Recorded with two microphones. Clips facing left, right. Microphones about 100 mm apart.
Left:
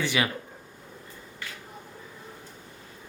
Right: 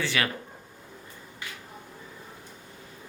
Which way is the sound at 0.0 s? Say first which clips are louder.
Left 2 dB; 15° left (ahead or behind).